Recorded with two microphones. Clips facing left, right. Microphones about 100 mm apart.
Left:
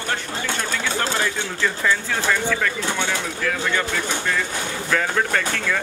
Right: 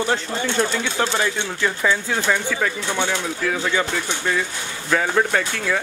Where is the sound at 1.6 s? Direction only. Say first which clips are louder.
Right 1 dB; 10° right (ahead or behind).